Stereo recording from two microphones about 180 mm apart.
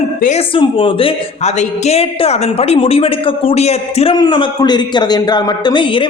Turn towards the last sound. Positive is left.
turn(degrees=25)  # may be behind; listen again after turning